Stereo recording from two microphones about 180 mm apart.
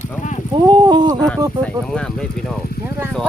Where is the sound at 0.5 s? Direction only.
25° right (ahead or behind).